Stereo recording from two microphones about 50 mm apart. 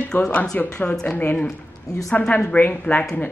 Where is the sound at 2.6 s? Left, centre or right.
Left.